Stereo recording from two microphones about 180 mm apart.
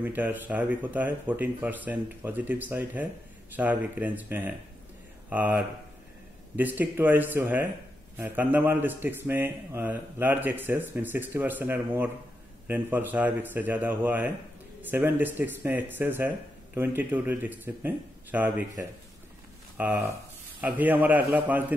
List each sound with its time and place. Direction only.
0.0 s speech: 10° right (ahead or behind)